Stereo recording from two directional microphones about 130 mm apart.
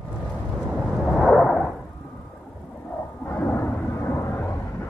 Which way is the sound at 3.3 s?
15° left (ahead or behind).